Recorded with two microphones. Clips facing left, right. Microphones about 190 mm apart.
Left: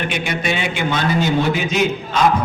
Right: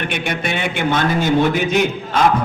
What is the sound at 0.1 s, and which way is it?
A man's voice, 55° right (ahead or behind).